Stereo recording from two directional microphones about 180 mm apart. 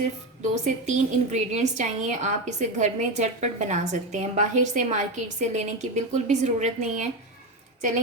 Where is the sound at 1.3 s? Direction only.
40° right (ahead or behind).